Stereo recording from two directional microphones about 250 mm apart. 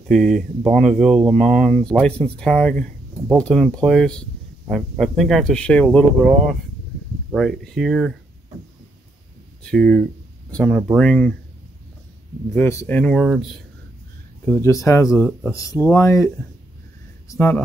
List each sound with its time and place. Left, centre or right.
0.1 s speech: centre
9.6 s speech: centre
12.5 s speech: centre
14.4 s speech: centre
17.3 s speech: centre